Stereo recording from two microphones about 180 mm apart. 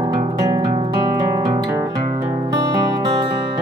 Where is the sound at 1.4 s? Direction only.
20° right (ahead or behind).